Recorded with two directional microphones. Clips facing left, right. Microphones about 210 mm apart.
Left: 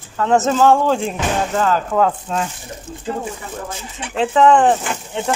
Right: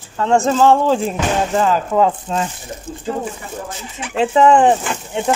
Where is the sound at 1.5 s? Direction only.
10° right (ahead or behind).